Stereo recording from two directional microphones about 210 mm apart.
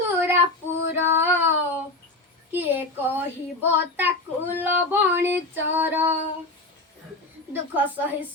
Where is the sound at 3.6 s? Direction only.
10° right (ahead or behind).